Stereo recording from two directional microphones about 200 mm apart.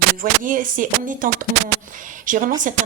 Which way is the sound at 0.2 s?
40° right (ahead or behind).